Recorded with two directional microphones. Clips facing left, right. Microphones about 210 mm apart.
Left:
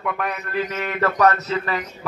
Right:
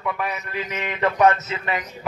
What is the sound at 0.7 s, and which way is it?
Speech, 15° right (ahead or behind).